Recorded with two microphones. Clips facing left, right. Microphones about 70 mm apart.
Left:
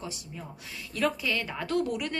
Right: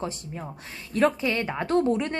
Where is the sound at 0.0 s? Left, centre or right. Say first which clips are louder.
Right 7 dB; right.